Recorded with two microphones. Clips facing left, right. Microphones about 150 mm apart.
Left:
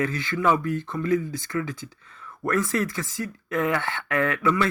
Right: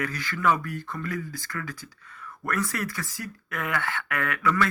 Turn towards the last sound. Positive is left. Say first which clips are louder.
# left 4 dB
turn(degrees=25)  # may be behind; listen again after turning